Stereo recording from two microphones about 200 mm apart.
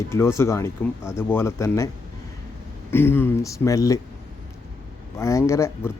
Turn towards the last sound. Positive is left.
turn(degrees=15)  # may be behind; listen again after turning